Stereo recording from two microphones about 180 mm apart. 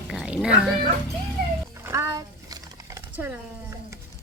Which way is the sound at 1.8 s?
15° right (ahead or behind).